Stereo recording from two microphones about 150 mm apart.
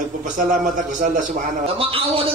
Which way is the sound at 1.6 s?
40° right (ahead or behind).